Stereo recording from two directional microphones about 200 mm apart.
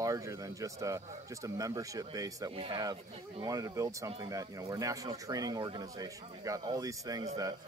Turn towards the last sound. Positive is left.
turn(degrees=-15)  # may be behind; listen again after turning